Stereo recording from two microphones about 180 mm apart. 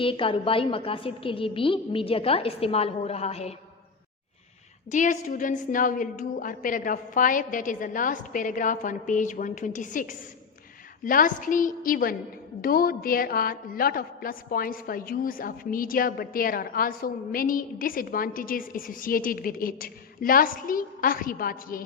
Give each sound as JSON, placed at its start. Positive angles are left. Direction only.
{"t": 0.0, "sound": "a woman's voice", "side_deg": 30}
{"t": 4.9, "sound": "a woman's voice", "side_deg": 45}